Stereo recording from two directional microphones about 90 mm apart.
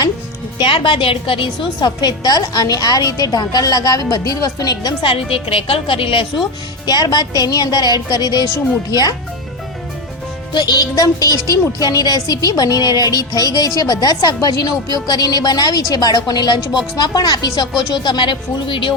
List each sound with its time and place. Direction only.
0.6 s a woman's voice: 60° left (ahead or behind)
1.8 s a woman's voice: 50° left (ahead or behind)
5.0 s a woman's voice: 90° left
6.8 s a woman's voice: 50° left (ahead or behind)
10.5 s a woman's voice: 50° left (ahead or behind); by 18.9 s 65° left (ahead or behind)